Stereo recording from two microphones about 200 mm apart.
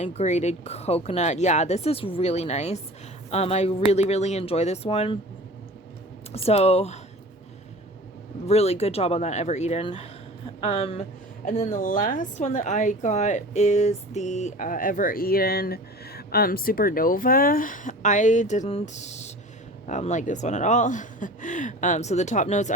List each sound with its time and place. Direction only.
0.0 s a woman's voice: 35° left (ahead or behind)
6.3 s a woman's voice: 30° left (ahead or behind)
8.4 s a woman's voice: 30° left (ahead or behind)